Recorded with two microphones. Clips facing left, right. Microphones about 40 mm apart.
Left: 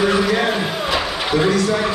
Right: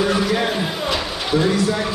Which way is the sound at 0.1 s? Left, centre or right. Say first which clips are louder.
Left 2 dB; centre.